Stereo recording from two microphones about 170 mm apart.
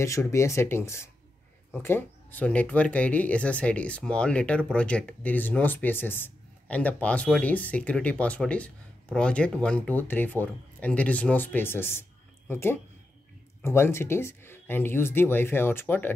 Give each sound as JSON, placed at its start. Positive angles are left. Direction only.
{"t": 0.0, "sound": "speech", "side_deg": 15}